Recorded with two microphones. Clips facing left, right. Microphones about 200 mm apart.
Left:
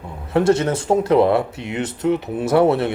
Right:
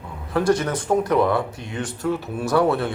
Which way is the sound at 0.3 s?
25° left (ahead or behind).